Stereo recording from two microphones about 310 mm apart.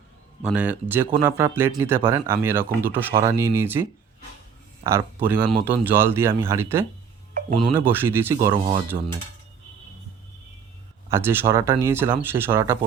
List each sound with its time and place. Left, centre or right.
0.4 s speech: centre
11.1 s speech: centre